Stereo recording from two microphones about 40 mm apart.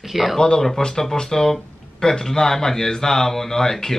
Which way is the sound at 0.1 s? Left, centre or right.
Centre.